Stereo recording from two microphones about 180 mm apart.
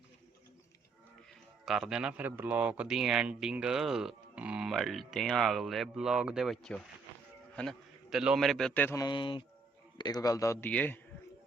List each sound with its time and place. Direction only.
1.6 s a man's voice: centre (ahead or behind)